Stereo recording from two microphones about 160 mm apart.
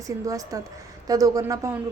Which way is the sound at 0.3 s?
20° right (ahead or behind).